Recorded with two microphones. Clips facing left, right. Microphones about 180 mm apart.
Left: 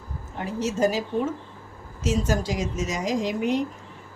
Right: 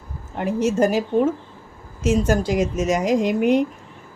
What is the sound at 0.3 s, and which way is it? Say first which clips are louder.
A woman's voice: right 6 dB; 60° right (ahead or behind).